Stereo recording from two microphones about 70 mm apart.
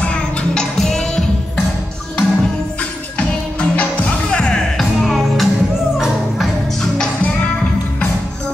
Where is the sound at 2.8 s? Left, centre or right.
Centre.